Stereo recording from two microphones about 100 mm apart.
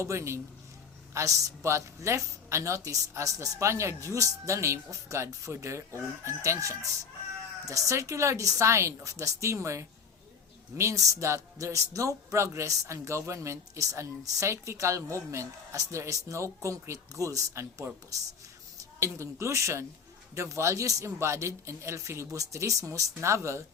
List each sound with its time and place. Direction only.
0.0 s speech: 30° right (ahead or behind)
18.9 s speech: 30° right (ahead or behind)